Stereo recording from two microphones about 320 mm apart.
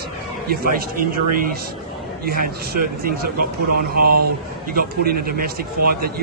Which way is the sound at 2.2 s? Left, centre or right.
Right.